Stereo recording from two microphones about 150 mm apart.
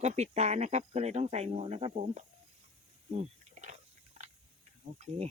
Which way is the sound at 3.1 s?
50° right (ahead or behind).